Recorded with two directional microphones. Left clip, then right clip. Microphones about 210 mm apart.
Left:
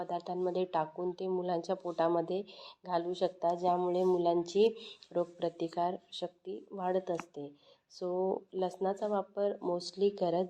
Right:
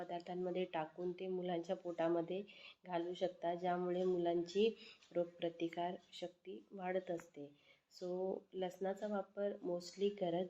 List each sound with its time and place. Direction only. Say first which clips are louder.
0.0 s speech: left 9 dB; 20° left (ahead or behind)